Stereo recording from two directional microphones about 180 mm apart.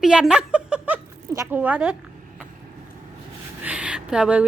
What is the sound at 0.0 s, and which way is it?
Chuckle, 5° right (ahead or behind).